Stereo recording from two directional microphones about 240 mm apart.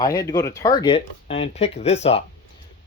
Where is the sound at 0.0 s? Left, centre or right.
Centre.